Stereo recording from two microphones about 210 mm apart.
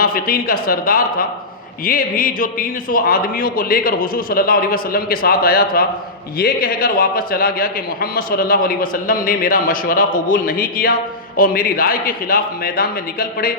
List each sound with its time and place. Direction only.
0.0 s a man's voice: 45° left (ahead or behind)